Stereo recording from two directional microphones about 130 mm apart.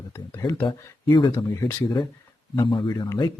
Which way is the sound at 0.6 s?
35° left (ahead or behind).